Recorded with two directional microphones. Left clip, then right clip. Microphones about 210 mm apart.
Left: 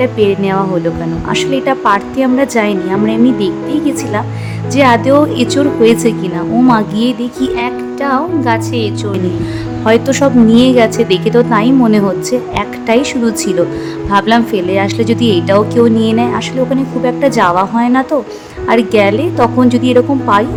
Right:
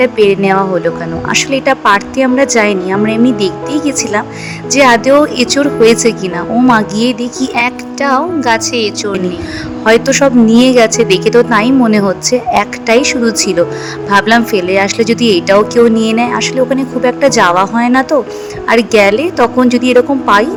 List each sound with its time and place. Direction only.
0.0 s speech: 25° right (ahead or behind)